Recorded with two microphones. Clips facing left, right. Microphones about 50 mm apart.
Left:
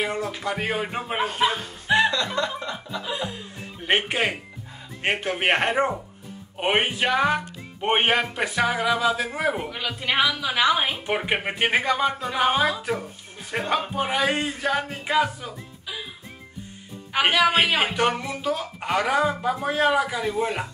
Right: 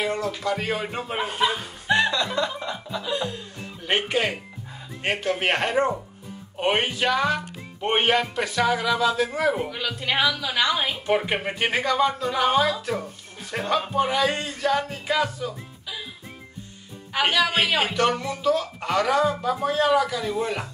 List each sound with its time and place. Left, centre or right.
0.0 s a man's voice: centre
1.9 s chuckle: centre
2.2 s a sound: centre
3.0 s chuckle: centre
3.8 s a man's voice: left
17.1 s a man's voice: centre